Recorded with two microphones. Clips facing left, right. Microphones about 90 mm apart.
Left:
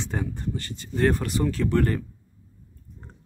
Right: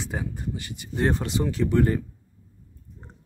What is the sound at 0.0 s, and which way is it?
Speech, 10° right (ahead or behind).